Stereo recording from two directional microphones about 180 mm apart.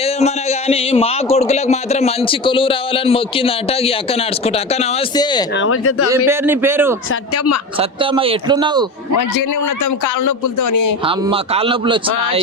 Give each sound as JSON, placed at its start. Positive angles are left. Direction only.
{"t": 0.0, "sound": "a man's voice", "side_deg": 35}
{"t": 5.1, "sound": "speech", "side_deg": 25}
{"t": 6.1, "sound": "a man's voice", "side_deg": -15}
{"t": 7.8, "sound": "speech", "side_deg": -30}
{"t": 11.0, "sound": "speech", "side_deg": -30}